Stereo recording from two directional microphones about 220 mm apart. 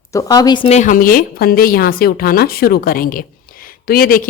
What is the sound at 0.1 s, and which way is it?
Speech, 15° left (ahead or behind).